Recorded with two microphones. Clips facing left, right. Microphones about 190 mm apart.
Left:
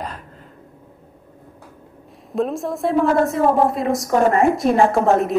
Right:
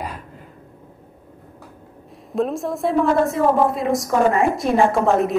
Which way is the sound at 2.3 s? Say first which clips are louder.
Even; centre (ahead or behind).